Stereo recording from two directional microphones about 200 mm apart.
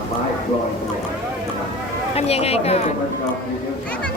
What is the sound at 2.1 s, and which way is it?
Speech, 30° left (ahead or behind).